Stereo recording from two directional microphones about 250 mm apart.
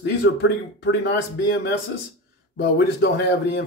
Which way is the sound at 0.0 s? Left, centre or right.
Left.